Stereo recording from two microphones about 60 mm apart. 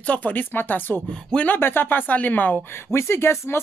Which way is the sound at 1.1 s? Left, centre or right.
Centre.